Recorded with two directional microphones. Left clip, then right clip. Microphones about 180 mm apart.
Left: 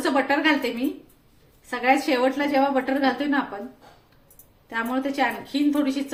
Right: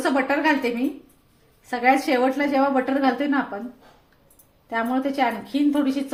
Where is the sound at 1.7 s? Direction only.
45° right (ahead or behind).